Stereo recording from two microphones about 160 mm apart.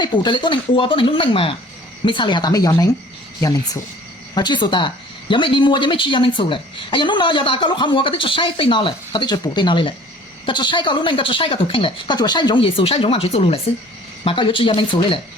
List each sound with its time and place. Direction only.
0.0 s a woman's voice: 30° left (ahead or behind)
4.4 s a woman's voice: 30° left (ahead or behind)